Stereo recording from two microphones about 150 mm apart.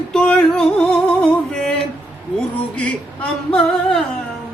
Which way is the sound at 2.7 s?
5° left (ahead or behind).